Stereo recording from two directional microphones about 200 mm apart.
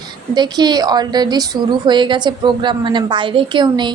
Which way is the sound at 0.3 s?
20° right (ahead or behind).